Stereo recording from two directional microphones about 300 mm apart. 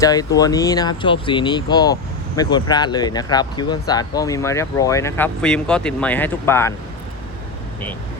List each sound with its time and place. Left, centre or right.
0.0 s speech: centre